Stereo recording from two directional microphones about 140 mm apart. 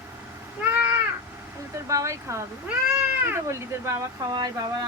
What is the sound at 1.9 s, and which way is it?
Speech, 20° right (ahead or behind).